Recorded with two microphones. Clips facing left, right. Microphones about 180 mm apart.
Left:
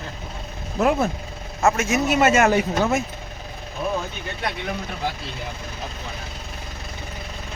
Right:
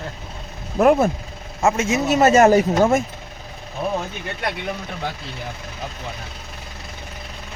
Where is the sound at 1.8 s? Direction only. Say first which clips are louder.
Right 1 dB; 25° right (ahead or behind).